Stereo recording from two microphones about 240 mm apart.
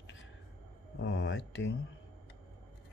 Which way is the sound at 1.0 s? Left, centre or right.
Left.